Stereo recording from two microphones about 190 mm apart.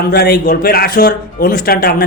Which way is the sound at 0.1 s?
55° left (ahead or behind).